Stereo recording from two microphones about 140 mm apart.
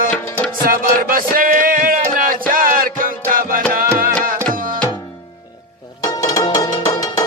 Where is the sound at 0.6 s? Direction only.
85° right.